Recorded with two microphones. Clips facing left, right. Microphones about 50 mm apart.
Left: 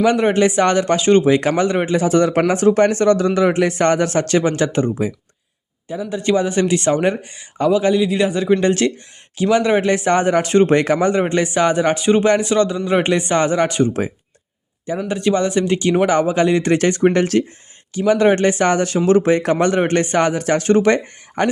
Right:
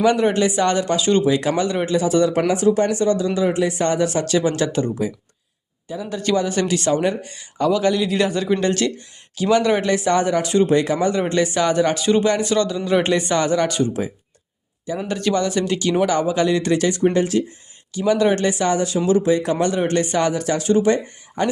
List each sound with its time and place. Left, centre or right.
0.0 s speech: left
6.0 s speech: left
8.6 s speech: left
9.9 s speech: left
14.9 s speech: centre; by 17.0 s left
17.0 s speech: left
17.9 s speech: left